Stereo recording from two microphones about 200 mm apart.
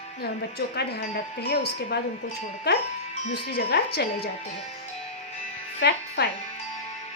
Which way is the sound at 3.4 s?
50° left (ahead or behind).